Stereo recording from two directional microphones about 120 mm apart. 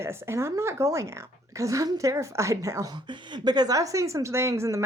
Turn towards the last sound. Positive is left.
turn(degrees=-25)  # may be behind; listen again after turning